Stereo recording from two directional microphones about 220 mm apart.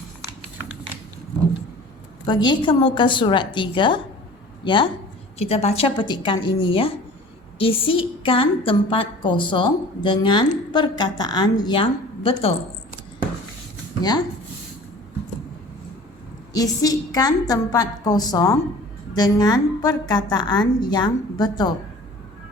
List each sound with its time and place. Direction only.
2.2 s a woman's voice: 20° left (ahead or behind)
16.5 s a woman's voice: 15° left (ahead or behind)